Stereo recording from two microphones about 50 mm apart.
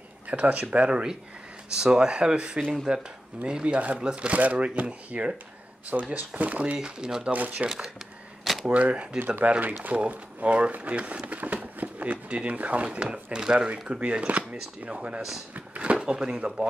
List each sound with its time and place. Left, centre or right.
0.3 s speech: right
6.8 s speech: centre
7.2 s speech: right
7.6 s speech: centre
8.6 s speech: right
15.5 s drawer open or close: right
16.0 s speech: centre